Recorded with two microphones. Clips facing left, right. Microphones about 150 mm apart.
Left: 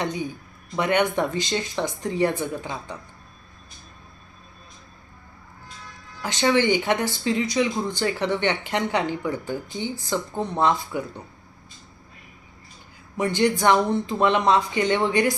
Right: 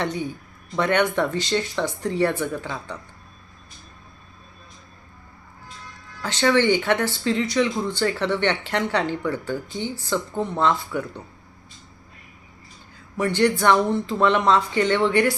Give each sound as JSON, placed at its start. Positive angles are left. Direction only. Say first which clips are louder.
{"t": 0.0, "sound": "speech", "louder": "right 1 dB", "side_deg": 15}
{"t": 6.5, "sound": "speech", "louder": "right 1 dB", "side_deg": 15}
{"t": 13.1, "sound": "speech", "louder": "right 1 dB", "side_deg": 15}